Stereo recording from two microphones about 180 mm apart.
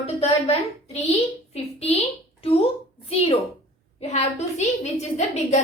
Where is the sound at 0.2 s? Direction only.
35° left (ahead or behind).